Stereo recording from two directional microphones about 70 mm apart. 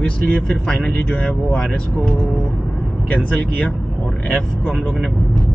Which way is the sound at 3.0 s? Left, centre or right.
Left.